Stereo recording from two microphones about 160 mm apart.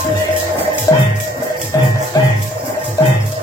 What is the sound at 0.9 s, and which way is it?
Music, 20° left (ahead or behind).